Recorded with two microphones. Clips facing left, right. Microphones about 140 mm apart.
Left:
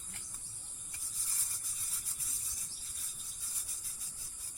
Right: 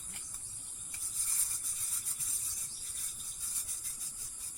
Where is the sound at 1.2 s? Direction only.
5° left (ahead or behind).